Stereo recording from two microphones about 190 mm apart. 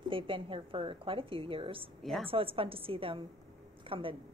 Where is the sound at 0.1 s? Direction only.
30° right (ahead or behind).